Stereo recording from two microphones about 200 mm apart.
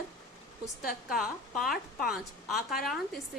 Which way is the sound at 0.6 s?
Centre (ahead or behind).